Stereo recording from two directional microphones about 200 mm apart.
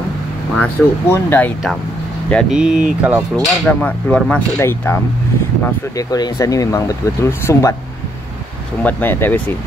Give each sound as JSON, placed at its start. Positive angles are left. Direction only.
{"t": 0.6, "sound": "speech", "side_deg": 10}
{"t": 2.6, "sound": "speech", "side_deg": -5}
{"t": 3.3, "sound": "speech", "side_deg": 5}
{"t": 5.9, "sound": "speech", "side_deg": 20}
{"t": 8.8, "sound": "speech", "side_deg": 10}